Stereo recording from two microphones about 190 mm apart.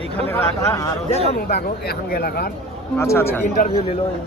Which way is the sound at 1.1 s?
35° left (ahead or behind).